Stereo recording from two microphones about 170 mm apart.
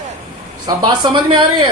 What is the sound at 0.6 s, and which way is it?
Speech, 25° right (ahead or behind).